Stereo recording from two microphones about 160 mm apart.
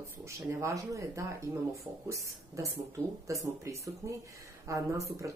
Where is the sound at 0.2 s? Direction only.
20° right (ahead or behind).